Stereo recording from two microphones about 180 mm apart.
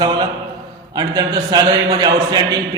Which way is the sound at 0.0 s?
25° right (ahead or behind).